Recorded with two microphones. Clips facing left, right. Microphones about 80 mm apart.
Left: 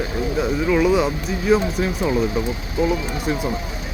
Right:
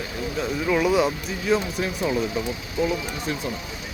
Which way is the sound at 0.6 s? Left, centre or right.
Centre.